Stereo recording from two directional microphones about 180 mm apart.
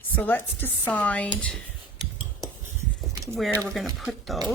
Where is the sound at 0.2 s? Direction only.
10° left (ahead or behind).